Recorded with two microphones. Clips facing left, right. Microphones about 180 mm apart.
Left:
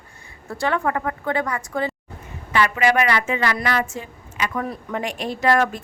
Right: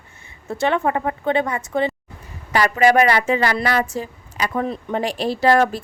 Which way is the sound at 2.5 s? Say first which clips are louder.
Right 3 dB; 40° right (ahead or behind).